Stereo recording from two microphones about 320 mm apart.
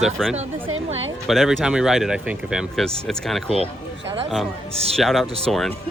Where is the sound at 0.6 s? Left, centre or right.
Right.